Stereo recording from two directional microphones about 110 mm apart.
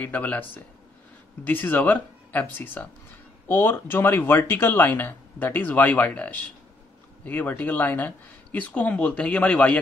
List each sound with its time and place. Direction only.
0.0 s speech: 15° left (ahead or behind)